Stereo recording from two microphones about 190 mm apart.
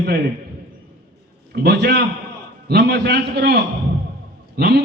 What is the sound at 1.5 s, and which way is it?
A man's voice, 55° right (ahead or behind).